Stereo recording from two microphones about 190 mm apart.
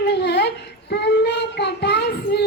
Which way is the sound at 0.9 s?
65° left (ahead or behind).